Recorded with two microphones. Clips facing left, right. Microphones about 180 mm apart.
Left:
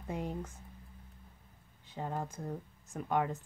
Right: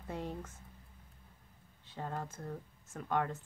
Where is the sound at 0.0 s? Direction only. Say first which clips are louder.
Left 3 dB; 15° left (ahead or behind).